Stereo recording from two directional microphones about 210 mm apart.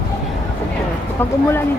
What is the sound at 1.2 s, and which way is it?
Speech, 10° left (ahead or behind).